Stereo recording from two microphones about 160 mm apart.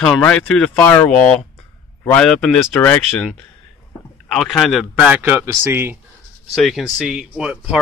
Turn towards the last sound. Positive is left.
turn(degrees=-5)  # may be behind; listen again after turning